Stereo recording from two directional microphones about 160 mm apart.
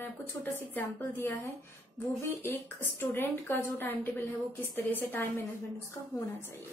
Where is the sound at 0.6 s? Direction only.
15° left (ahead or behind).